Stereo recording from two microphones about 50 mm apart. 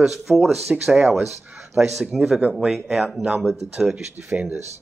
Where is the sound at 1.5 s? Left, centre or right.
Centre.